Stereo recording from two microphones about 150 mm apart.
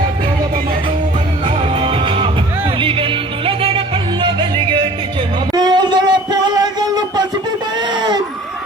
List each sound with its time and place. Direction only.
1.8 s music: 35° right (ahead or behind)